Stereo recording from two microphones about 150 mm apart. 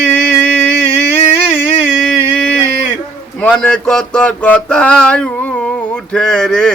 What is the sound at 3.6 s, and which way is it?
Speech, 5° left (ahead or behind).